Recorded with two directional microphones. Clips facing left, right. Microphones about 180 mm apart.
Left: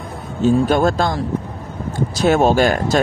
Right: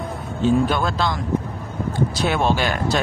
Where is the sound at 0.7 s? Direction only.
45° left (ahead or behind).